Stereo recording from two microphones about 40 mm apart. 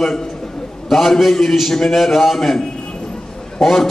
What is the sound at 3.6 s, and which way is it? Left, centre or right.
Speech, centre.